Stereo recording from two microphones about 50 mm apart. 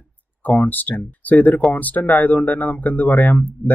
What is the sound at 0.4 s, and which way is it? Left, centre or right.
Speech, left.